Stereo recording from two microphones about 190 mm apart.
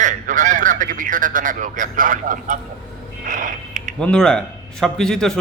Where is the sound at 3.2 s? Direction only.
45° right (ahead or behind).